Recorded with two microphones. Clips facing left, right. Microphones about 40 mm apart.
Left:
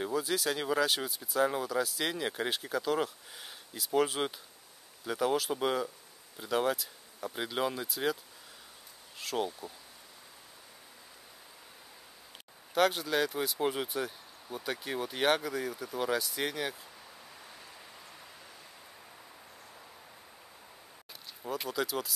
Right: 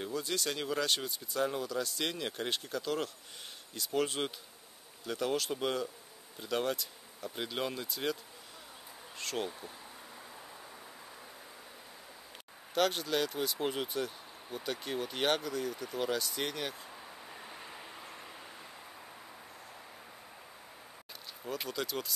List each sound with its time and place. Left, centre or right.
0.0 s speech: centre
9.2 s speech: centre
12.7 s speech: centre
17.5 s vehicle: right
21.5 s speech: centre